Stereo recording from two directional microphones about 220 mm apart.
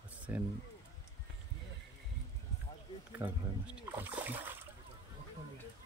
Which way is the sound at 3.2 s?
5° right (ahead or behind).